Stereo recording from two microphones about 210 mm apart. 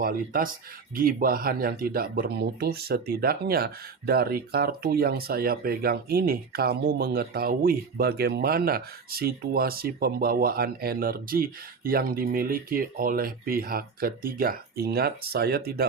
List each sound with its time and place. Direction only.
0.0 s speech: 45° right (ahead or behind)